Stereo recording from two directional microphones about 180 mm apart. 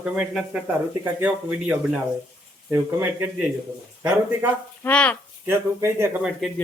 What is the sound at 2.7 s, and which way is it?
Speech, 10° right (ahead or behind).